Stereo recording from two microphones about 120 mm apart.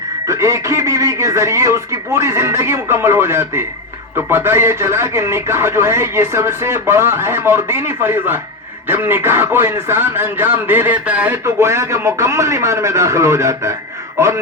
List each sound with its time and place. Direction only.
0.3 s speech: 25° right (ahead or behind)
11.4 s speech: 25° right (ahead or behind)